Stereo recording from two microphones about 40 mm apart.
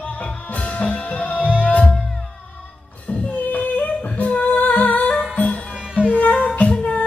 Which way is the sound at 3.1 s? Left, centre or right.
Left.